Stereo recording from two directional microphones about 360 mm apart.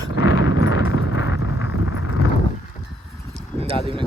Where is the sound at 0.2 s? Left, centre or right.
Left.